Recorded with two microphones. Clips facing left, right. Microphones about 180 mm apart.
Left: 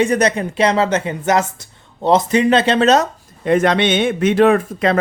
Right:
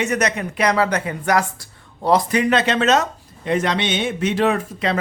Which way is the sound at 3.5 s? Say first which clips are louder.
Left 6 dB; 55° left (ahead or behind).